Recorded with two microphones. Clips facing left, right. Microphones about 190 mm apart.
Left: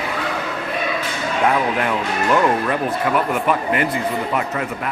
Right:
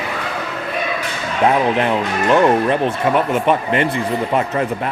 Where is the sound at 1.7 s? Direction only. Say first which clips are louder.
Right 3 dB; 25° right (ahead or behind).